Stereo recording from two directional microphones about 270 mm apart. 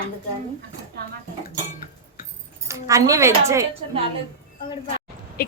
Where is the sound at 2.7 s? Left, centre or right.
Centre.